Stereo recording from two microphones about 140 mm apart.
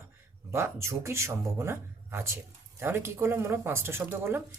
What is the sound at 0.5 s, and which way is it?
Speech, 20° right (ahead or behind).